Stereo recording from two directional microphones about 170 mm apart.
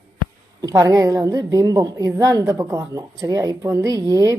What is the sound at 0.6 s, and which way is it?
A woman's voice, 20° right (ahead or behind).